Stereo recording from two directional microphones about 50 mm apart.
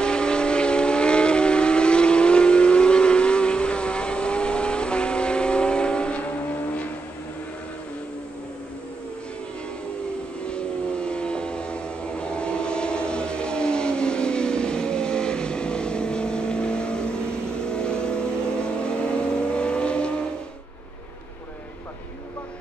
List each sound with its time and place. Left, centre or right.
0.0 s vehicle: centre
10.4 s vehicle: left